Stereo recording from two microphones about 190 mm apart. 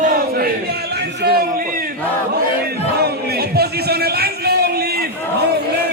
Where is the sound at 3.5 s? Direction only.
55° right (ahead or behind).